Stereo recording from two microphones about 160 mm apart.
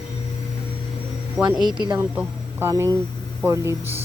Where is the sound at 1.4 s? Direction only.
5° right (ahead or behind).